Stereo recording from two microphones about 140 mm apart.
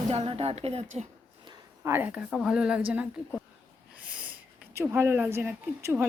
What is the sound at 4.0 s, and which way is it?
Snort, 10° right (ahead or behind).